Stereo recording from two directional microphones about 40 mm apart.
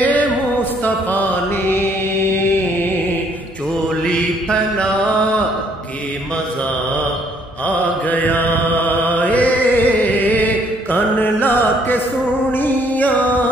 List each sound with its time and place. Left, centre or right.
0.0 s music: left
1.5 s mantra: left
4.0 s mantra: left
7.6 s mantra: left
12.5 s music: left